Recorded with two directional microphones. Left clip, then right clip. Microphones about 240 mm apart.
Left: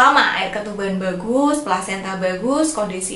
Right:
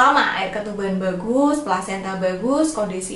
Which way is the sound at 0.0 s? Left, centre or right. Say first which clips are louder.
Left 2 dB; centre.